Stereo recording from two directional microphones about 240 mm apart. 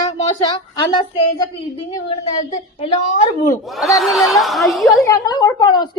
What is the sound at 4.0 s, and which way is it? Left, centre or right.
A woman's voice, centre.